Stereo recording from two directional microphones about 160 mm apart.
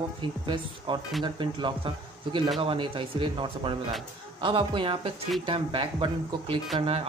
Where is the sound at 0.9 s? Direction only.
30° right (ahead or behind).